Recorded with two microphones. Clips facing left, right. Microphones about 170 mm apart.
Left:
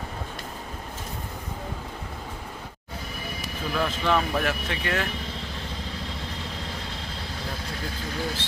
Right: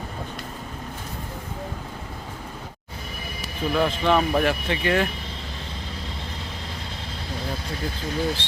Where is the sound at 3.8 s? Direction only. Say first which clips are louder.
Right 4 dB; centre (ahead or behind).